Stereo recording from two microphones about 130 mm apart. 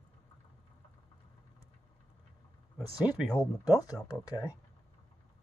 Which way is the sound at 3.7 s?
30° left (ahead or behind).